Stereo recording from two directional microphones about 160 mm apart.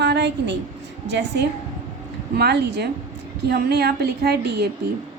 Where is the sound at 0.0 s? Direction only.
90° right.